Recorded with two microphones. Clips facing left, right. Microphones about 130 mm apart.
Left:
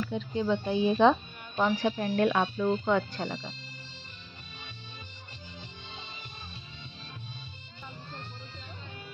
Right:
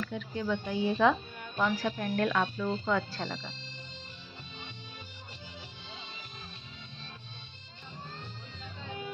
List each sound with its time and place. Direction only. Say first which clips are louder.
0.0 s speech: left 4 dB; 25° left (ahead or behind)
3.2 s speech: left 3 dB; 5° left (ahead or behind)